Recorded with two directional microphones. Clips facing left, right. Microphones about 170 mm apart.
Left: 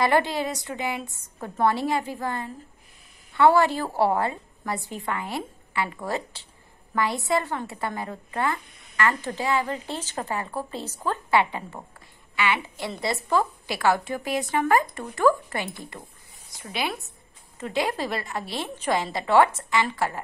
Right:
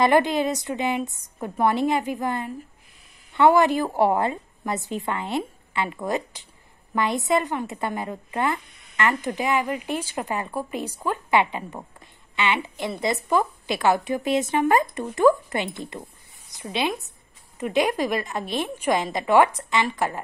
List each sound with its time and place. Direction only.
0.0 s a woman's voice: 20° right (ahead or behind)